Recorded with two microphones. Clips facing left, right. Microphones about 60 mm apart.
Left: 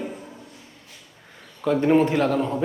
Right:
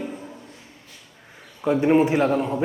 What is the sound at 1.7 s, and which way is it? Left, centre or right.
Speech, centre.